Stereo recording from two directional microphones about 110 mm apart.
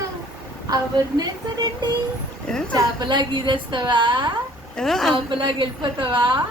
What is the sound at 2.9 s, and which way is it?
A woman's voice, 45° right (ahead or behind).